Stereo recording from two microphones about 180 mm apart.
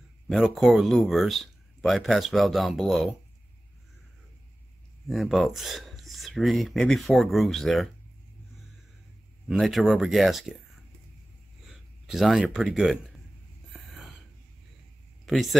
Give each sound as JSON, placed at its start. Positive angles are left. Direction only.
{"t": 0.3, "sound": "speech", "side_deg": 0}
{"t": 5.0, "sound": "speech", "side_deg": 0}
{"t": 9.5, "sound": "speech", "side_deg": 0}
{"t": 11.6, "sound": "a sound", "side_deg": 0}
{"t": 12.5, "sound": "speech", "side_deg": 0}
{"t": 13.7, "sound": "a sound", "side_deg": 0}
{"t": 15.2, "sound": "speech", "side_deg": 0}